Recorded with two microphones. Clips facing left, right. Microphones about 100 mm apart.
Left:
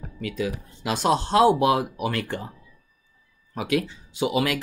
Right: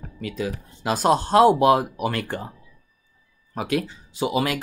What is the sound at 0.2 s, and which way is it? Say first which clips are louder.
Speech: even; 40° right (ahead or behind).